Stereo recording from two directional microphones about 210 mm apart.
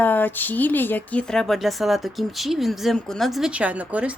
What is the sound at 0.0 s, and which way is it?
A woman's voice, 10° left (ahead or behind).